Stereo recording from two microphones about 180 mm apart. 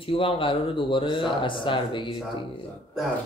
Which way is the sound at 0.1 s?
30° left (ahead or behind).